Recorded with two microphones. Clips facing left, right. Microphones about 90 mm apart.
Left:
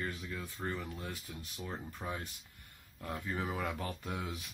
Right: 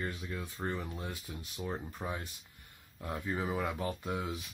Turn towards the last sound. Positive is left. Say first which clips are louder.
# right 4 dB
turn(degrees=-10)  # may be behind; listen again after turning